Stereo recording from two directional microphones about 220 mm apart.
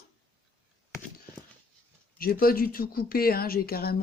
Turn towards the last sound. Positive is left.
turn(degrees=45)  # may be behind; listen again after turning